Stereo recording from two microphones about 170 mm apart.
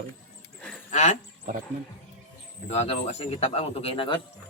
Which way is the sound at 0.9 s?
45° left (ahead or behind).